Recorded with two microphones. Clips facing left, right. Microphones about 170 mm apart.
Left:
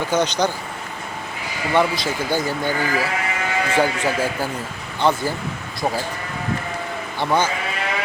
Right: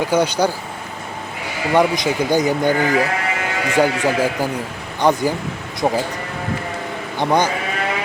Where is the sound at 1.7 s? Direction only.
15° right (ahead or behind).